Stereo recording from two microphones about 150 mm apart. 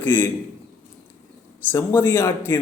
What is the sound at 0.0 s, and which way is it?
Speech, 15° left (ahead or behind).